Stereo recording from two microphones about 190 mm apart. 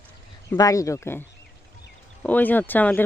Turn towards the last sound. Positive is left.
turn(degrees=10)  # may be behind; listen again after turning